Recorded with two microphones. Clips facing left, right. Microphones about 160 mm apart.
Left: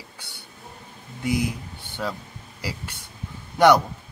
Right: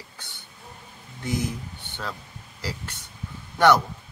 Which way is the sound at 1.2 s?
10° left (ahead or behind).